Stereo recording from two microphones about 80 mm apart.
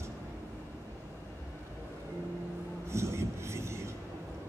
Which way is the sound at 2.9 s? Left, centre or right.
Right.